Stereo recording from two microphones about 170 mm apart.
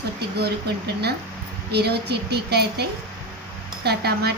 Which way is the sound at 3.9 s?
70° right (ahead or behind).